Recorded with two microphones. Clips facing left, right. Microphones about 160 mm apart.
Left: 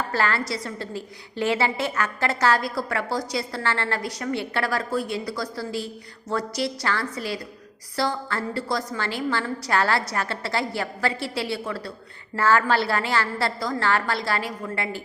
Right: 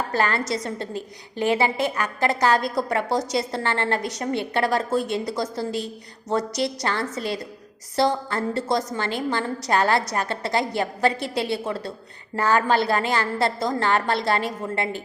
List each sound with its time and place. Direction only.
0.1 s a woman's voice: 20° right (ahead or behind)